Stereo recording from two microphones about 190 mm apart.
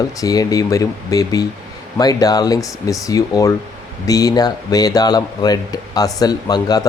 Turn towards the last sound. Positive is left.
turn(degrees=20)  # may be behind; listen again after turning